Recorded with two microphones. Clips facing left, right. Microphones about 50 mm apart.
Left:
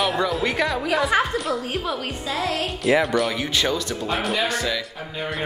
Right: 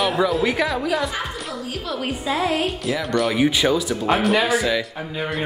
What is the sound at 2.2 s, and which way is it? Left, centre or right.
Speech, centre.